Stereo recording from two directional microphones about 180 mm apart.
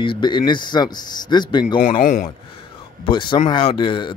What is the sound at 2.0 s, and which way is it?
Speech, 45° left (ahead or behind).